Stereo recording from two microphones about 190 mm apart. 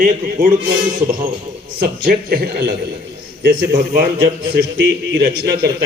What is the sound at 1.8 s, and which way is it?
A man's voice, 50° right (ahead or behind).